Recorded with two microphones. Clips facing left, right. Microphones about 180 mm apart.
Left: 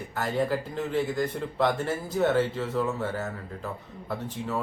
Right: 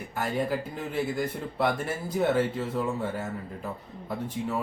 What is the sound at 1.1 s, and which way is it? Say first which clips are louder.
Speech: left 2 dB; 10° right (ahead or behind).